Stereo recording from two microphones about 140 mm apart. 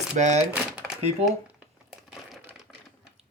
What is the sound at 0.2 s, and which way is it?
Speech, 55° right (ahead or behind).